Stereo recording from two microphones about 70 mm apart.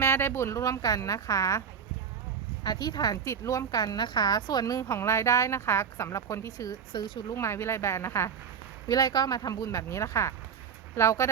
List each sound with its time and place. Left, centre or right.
0.0 s speech: left
2.6 s a woman's voice: left
3.2 s a woman's voice: left
4.8 s speech: left
6.7 s speech: left
7.3 s speech: left
8.9 s a woman's voice: left
9.6 s speech: left